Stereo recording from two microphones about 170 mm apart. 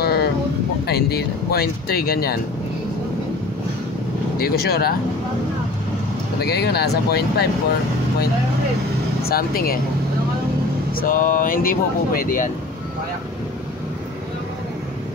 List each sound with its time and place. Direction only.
0.0 s a sound: 70° left (ahead or behind)
0.8 s speech: 65° left (ahead or behind)
4.4 s speech: 65° left (ahead or behind)
6.4 s speech: 70° left (ahead or behind)
9.2 s speech: 60° left (ahead or behind)
11.0 s speech: 55° left (ahead or behind)